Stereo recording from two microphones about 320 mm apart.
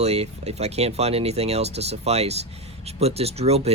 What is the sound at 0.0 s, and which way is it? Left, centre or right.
Speech, centre.